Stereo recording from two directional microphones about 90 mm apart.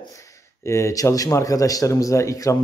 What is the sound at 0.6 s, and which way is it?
Speech, 35° left (ahead or behind).